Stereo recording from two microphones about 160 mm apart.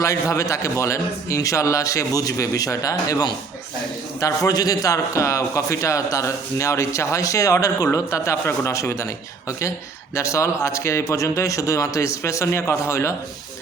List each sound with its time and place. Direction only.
0.0 s a man's voice: 20° left (ahead or behind)